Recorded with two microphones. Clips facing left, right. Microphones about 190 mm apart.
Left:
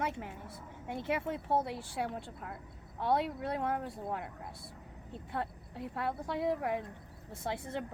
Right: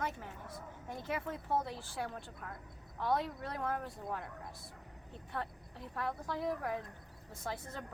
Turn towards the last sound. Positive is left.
turn(degrees=25)  # may be behind; listen again after turning